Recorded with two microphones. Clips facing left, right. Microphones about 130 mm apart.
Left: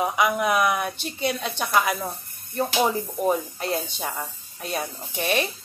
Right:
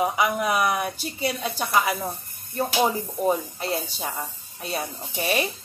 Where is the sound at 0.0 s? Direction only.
5° right (ahead or behind).